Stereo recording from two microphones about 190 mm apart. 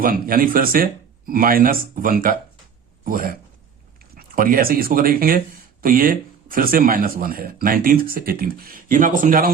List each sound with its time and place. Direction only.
0.0 s a man's voice: 50° right (ahead or behind)